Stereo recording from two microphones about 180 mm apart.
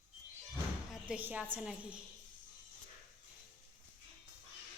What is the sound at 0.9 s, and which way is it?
A woman's voice, 5° right (ahead or behind).